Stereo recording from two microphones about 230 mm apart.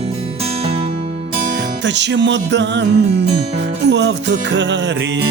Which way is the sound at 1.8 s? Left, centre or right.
Right.